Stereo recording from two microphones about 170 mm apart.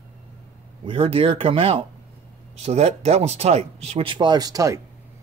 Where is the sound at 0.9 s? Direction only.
35° right (ahead or behind).